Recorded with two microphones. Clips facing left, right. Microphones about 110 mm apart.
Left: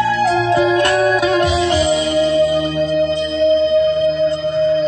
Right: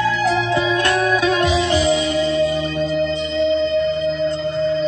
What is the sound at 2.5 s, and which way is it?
Music, 65° left (ahead or behind).